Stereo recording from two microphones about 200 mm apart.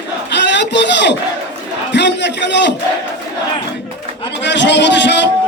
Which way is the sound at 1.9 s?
60° left (ahead or behind).